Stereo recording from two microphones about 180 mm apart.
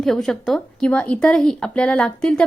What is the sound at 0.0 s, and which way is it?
A woman's voice, centre (ahead or behind).